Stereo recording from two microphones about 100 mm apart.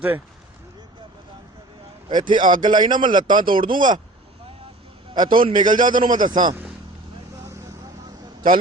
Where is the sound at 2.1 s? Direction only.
50° right (ahead or behind).